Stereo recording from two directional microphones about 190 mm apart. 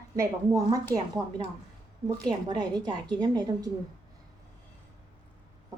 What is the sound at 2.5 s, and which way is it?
A woman's voice, 20° right (ahead or behind).